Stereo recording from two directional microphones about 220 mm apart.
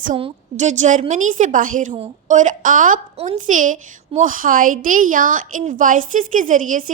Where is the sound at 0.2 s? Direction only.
30° right (ahead or behind).